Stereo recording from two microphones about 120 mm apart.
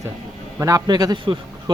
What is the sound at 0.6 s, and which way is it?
Speech, 30° right (ahead or behind).